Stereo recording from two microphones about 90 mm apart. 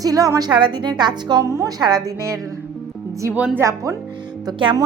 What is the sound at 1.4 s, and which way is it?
Speech, 35° right (ahead or behind).